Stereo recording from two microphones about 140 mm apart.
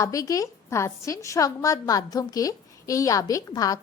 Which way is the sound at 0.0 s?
25° left (ahead or behind).